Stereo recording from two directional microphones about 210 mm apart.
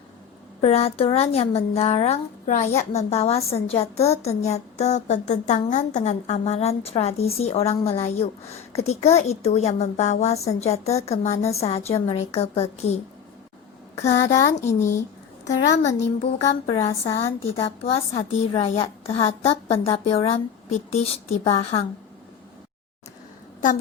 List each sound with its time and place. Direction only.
0.6 s a woman's voice: 30° left (ahead or behind)
14.0 s a woman's voice: 35° left (ahead or behind)
14.6 s a woman's voice: 10° left (ahead or behind)
16.2 s a woman's voice: 30° left (ahead or behind)